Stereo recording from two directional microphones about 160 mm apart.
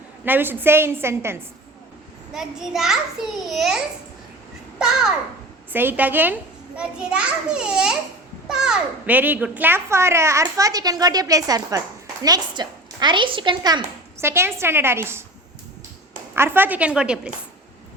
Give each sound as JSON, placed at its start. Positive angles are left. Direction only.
{"t": 0.3, "sound": "a child's voice", "side_deg": -10}
{"t": 2.3, "sound": "a child's voice", "side_deg": -5}
{"t": 16.3, "sound": "a child's voice", "side_deg": -15}